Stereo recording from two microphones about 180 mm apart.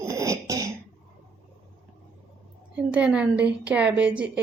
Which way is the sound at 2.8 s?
5° right (ahead or behind).